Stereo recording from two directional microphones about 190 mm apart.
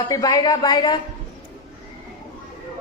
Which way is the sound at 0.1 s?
20° left (ahead or behind).